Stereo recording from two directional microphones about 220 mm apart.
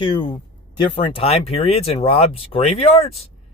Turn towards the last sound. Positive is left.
turn(degrees=25)  # may be behind; listen again after turning